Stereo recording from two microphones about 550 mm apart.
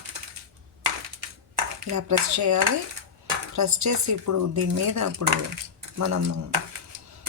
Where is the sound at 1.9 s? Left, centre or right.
Right.